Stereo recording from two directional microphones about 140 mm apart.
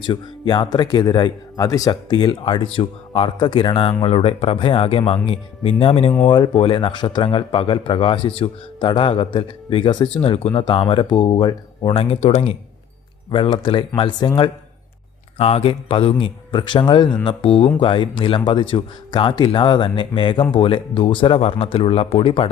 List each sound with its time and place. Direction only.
0.0 s speech: 35° left (ahead or behind)
10.2 s speech: 45° left (ahead or behind)
10.5 s speech: 35° left (ahead or behind)
11.9 s speech: 45° left (ahead or behind)
13.3 s speech: 35° left (ahead or behind)
15.4 s speech: 45° left (ahead or behind)